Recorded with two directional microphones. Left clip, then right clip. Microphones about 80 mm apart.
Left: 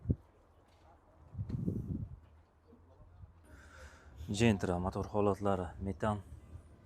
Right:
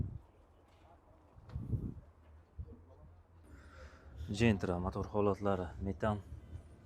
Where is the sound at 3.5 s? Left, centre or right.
Left.